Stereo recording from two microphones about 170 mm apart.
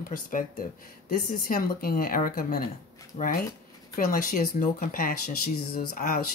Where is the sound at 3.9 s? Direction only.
55° left (ahead or behind).